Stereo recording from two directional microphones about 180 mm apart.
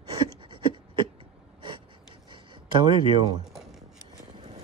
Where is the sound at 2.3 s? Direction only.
25° right (ahead or behind).